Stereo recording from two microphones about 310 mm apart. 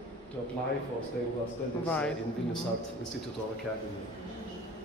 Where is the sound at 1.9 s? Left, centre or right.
Centre.